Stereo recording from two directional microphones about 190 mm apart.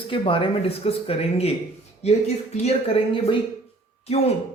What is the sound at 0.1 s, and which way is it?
A man's voice, 30° left (ahead or behind).